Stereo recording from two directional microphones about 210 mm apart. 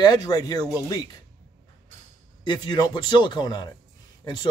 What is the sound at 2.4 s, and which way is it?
Speech, 20° left (ahead or behind).